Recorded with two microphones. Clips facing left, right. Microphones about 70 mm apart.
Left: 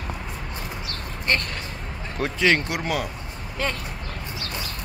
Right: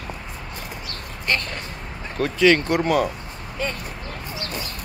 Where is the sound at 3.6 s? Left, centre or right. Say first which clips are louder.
Even; left.